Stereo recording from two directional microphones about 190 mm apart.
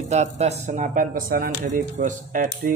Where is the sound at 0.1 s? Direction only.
35° right (ahead or behind).